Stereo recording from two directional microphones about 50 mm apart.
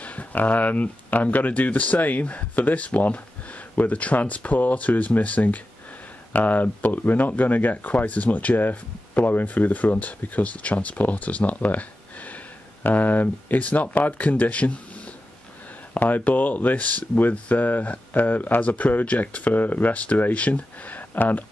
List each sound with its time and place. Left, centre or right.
0.0 s speech: left
12.8 s speech: left
15.9 s speech: left